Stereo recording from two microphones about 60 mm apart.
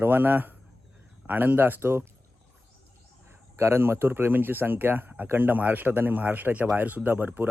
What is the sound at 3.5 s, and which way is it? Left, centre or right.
Speech, right.